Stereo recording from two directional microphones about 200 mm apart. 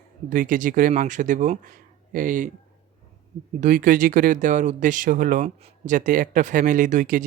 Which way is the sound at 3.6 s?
40° right (ahead or behind).